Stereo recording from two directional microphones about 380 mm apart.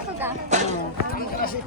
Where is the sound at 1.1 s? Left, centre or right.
Left.